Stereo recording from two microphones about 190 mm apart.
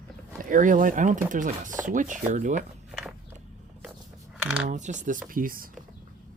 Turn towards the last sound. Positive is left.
turn(degrees=-50)  # may be behind; listen again after turning